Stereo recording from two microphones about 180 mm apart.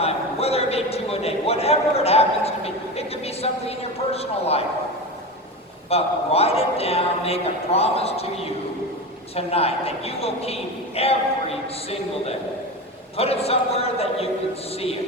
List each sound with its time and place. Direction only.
0.0 s a sound: 35° left (ahead or behind)
5.9 s a man's voice: 35° left (ahead or behind)
9.3 s a man's voice: 35° left (ahead or behind)